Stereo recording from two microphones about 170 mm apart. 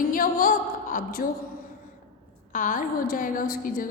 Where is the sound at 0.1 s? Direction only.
55° left (ahead or behind).